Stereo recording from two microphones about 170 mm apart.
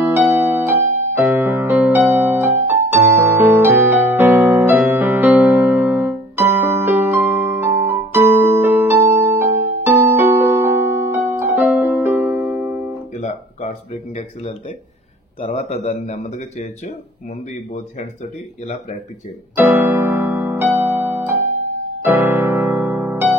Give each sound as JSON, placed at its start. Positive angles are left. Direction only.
{"t": 0.0, "sound": "music", "side_deg": -15}
{"t": 15.4, "sound": "speech", "side_deg": 40}
{"t": 19.5, "sound": "music", "side_deg": -10}